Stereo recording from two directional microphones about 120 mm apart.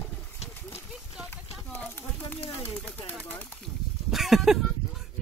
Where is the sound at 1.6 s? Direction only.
10° left (ahead or behind).